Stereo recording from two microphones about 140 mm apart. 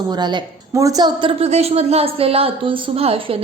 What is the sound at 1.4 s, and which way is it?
A woman's voice, 45° right (ahead or behind).